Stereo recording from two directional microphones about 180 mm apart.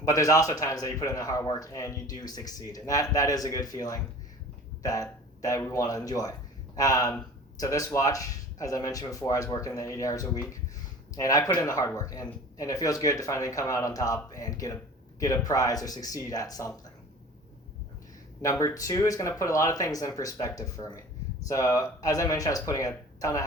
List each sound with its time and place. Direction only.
0.0 s speech: 20° left (ahead or behind)
18.4 s speech: 20° left (ahead or behind)